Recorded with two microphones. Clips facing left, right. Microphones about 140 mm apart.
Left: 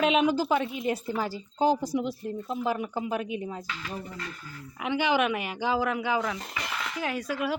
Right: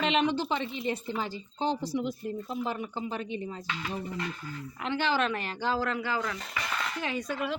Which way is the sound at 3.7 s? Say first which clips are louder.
Right 2 dB; 20° right (ahead or behind).